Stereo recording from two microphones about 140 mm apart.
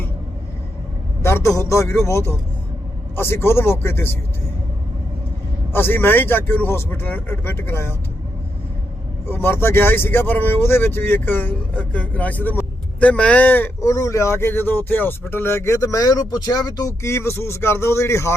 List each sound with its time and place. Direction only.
1.2 s speech: 20° left (ahead or behind)
5.7 s speech: 15° left (ahead or behind)
9.2 s speech: 15° left (ahead or behind)